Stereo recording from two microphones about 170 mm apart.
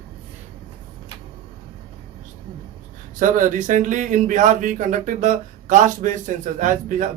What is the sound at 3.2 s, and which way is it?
Speech, 50° right (ahead or behind).